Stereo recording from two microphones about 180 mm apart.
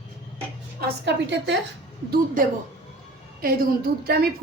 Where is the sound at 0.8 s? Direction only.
75° right (ahead or behind).